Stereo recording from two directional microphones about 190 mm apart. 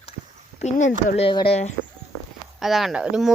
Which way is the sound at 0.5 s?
40° left (ahead or behind).